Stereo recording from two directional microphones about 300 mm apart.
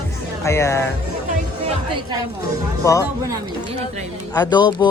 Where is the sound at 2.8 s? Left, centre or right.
Centre.